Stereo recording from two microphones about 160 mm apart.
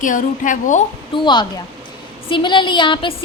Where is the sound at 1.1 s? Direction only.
30° left (ahead or behind).